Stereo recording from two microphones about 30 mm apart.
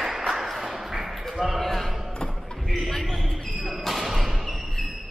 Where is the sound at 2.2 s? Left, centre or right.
Left.